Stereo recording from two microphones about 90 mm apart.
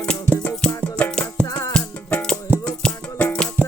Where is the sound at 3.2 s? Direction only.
10° left (ahead or behind).